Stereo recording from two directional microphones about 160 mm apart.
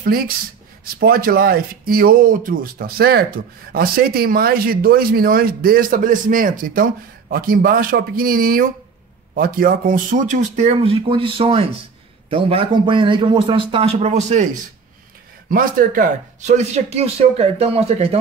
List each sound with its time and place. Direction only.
0.9 s a man's voice: 70° right (ahead or behind); by 14.6 s 50° right (ahead or behind)
15.5 s speech: 60° right (ahead or behind); by 18.1 s 40° right (ahead or behind)